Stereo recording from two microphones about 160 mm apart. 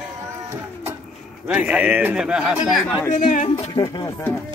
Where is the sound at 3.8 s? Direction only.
25° left (ahead or behind).